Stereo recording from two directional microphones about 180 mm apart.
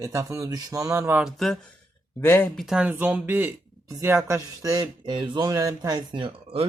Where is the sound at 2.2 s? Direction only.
10° left (ahead or behind).